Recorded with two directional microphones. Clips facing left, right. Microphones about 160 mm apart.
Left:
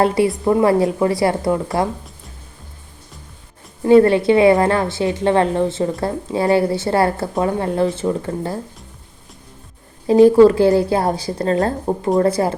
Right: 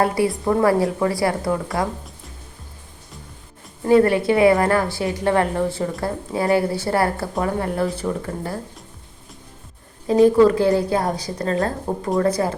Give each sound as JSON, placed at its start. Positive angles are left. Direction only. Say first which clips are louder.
{"t": 0.0, "sound": "a woman's voice", "louder": "left 4 dB", "side_deg": 25}
{"t": 3.8, "sound": "a woman's voice", "louder": "left 4 dB", "side_deg": 25}
{"t": 10.2, "sound": "a woman's voice", "louder": "left 4 dB", "side_deg": 30}